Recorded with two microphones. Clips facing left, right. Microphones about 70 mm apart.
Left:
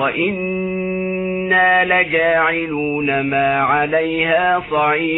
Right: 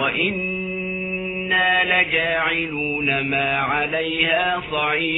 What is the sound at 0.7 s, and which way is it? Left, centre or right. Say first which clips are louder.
Music: left 7 dB; left.